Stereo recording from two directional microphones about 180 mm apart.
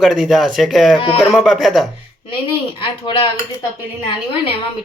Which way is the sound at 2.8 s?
30° left (ahead or behind).